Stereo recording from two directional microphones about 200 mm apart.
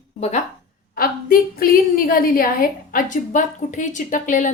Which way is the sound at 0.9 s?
45° left (ahead or behind).